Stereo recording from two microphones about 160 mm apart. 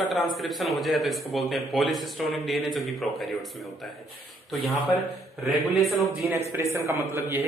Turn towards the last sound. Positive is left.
turn(degrees=-15)  # may be behind; listen again after turning